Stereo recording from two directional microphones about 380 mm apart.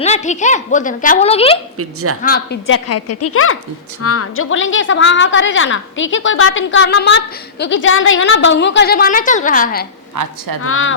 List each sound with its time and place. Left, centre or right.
0.0 s a woman's voice: centre
1.8 s a woman's voice: right
2.2 s a woman's voice: left
10.2 s a woman's voice: right
10.6 s a woman's voice: left